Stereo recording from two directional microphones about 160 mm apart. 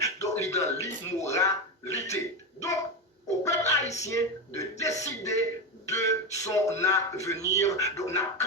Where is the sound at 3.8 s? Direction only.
45° left (ahead or behind).